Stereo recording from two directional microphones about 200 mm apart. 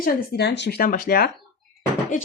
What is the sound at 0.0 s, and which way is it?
Speech, 55° left (ahead or behind).